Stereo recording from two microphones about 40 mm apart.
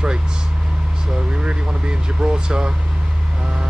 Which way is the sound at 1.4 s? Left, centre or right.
Right.